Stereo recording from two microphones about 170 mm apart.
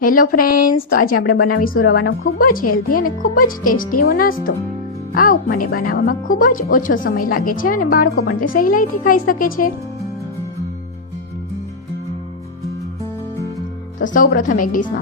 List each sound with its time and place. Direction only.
0.0 s speech: 55° left (ahead or behind)
14.0 s speech: 50° left (ahead or behind)